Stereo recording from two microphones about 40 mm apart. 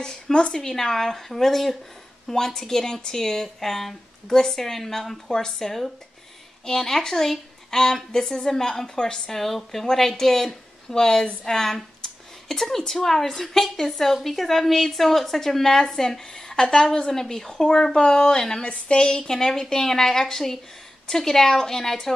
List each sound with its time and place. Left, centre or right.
0.0 s speech: left